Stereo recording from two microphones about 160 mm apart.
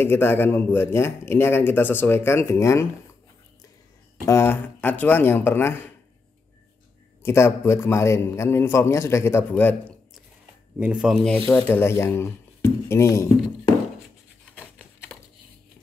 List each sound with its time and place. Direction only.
0.0 s speech: 15° left (ahead or behind)
4.3 s speech: 15° left (ahead or behind)
7.2 s speech: 15° left (ahead or behind)
10.8 s speech: 5° right (ahead or behind); by 13.3 s 15° left (ahead or behind)